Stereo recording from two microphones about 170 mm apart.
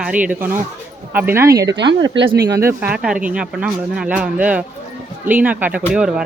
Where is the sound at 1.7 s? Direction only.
90° right.